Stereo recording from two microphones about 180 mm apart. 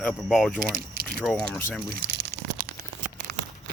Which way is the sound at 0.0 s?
Centre (ahead or behind).